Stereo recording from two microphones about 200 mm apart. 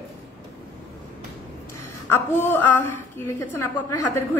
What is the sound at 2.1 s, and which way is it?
A woman's voice, 10° left (ahead or behind).